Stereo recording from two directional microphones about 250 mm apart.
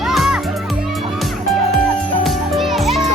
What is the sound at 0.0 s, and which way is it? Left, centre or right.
Music, centre.